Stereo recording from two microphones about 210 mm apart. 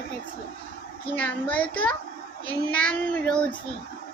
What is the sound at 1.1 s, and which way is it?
Speech, 5° left (ahead or behind).